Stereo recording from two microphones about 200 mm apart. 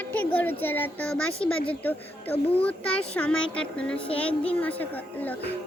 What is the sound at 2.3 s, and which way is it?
Speech, 30° left (ahead or behind).